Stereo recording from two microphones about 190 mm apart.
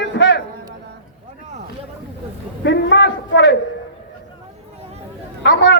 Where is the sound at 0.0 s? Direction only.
70° left (ahead or behind).